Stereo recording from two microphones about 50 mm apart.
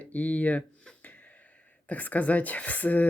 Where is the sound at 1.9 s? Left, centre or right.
Left.